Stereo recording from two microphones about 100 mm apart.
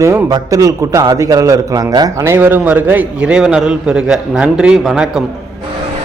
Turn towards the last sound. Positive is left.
turn(degrees=-5)  # may be behind; listen again after turning